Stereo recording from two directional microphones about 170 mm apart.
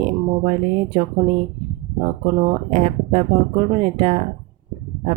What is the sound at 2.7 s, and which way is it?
Speech, 40° right (ahead or behind).